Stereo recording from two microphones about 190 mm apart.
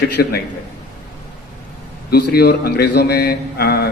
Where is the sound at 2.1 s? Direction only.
55° left (ahead or behind).